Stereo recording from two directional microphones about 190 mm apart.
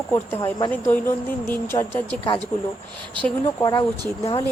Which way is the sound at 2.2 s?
30° left (ahead or behind).